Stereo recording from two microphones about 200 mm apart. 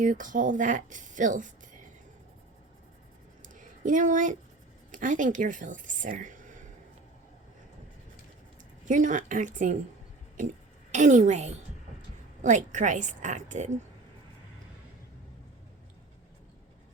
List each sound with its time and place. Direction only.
0.0 s speech: 40° right (ahead or behind)
3.4 s a sound: 40° right (ahead or behind)
4.9 s speech: 40° right (ahead or behind)
8.8 s speech: 40° right (ahead or behind)
10.9 s speech: 40° right (ahead or behind)